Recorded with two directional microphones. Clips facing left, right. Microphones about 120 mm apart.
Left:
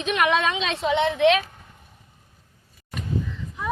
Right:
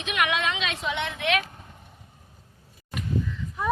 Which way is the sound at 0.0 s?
35° left (ahead or behind).